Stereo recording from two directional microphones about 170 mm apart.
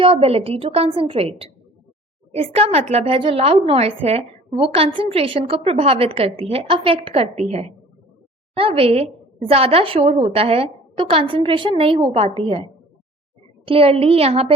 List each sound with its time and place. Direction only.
0.0 s a woman's voice: 35° right (ahead or behind)